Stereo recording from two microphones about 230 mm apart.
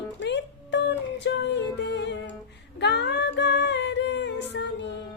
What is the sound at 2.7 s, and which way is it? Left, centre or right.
Music, left.